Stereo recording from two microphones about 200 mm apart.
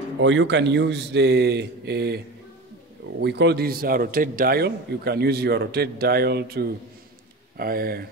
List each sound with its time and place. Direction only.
0.2 s speech: 65° right (ahead or behind); by 8.1 s 50° right (ahead or behind)